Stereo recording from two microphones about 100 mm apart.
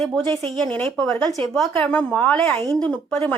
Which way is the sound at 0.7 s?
15° left (ahead or behind).